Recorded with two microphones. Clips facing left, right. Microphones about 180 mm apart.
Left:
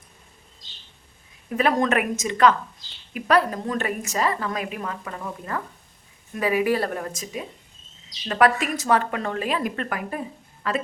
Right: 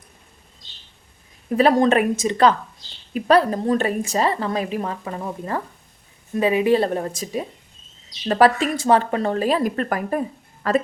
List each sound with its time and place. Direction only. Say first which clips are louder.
1.5 s a woman's voice: right 6 dB; 35° right (ahead or behind)